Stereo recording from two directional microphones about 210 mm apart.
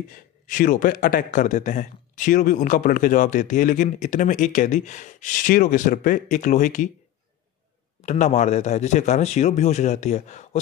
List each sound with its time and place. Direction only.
0.1 s a man's voice: 40° left (ahead or behind)
8.0 s a man's voice: 35° left (ahead or behind)